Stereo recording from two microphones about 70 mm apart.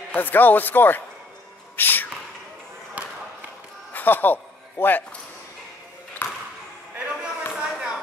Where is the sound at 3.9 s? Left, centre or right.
Left.